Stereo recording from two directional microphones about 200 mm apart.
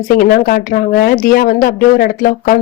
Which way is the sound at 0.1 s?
45° left (ahead or behind).